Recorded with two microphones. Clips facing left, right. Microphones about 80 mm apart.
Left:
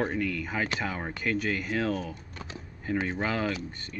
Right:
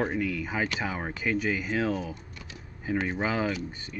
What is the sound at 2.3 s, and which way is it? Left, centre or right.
Computer keyboard, left.